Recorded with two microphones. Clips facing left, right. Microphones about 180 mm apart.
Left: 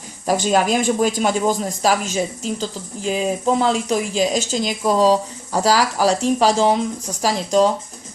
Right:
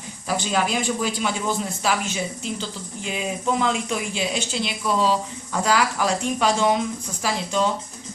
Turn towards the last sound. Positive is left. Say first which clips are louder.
# left 7 dB
turn(degrees=40)  # may be behind; listen again after turning